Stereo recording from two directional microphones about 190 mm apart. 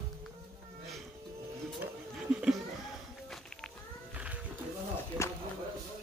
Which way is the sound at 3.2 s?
Centre (ahead or behind).